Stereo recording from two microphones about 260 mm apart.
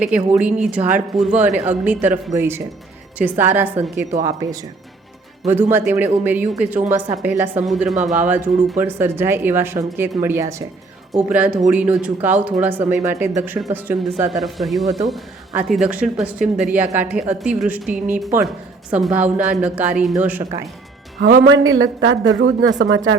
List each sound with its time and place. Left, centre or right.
0.3 s speech: centre
5.7 s speech: centre
21.2 s speech: right